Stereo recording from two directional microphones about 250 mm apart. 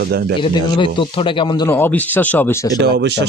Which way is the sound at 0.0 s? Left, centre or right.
Right.